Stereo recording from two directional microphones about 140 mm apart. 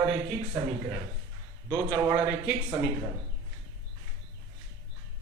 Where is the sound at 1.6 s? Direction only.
20° right (ahead or behind).